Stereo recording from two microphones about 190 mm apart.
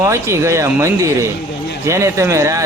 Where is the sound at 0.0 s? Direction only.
15° right (ahead or behind).